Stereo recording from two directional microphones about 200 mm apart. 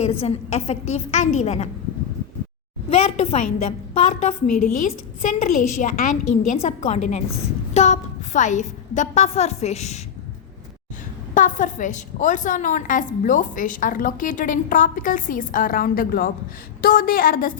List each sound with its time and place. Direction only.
0.0 s a woman's voice: 30° left (ahead or behind)
2.9 s a woman's voice: 30° left (ahead or behind)
11.3 s a woman's voice: 40° left (ahead or behind)